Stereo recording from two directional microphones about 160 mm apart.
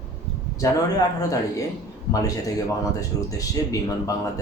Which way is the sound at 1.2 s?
20° left (ahead or behind).